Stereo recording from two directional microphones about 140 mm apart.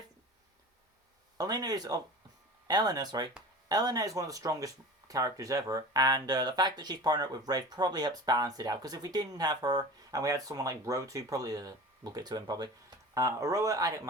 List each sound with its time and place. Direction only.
1.4 s speech: 25° right (ahead or behind)